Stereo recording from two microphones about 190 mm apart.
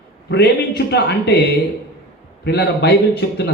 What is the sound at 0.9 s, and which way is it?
Speech, 65° left (ahead or behind).